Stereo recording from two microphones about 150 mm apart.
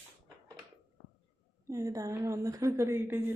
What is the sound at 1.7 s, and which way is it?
A woman's voice, 20° right (ahead or behind).